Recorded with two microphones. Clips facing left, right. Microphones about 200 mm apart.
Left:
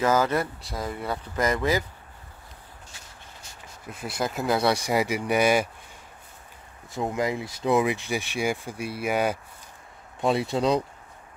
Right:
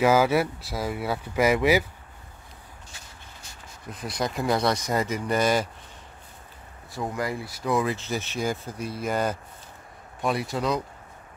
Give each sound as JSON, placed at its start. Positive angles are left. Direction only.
{"t": 0.0, "sound": "speech", "side_deg": -10}
{"t": 3.8, "sound": "speech", "side_deg": 5}
{"t": 6.9, "sound": "speech", "side_deg": 20}
{"t": 10.2, "sound": "speech", "side_deg": 25}